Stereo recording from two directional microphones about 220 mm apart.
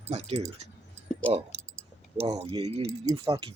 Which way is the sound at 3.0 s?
15° right (ahead or behind).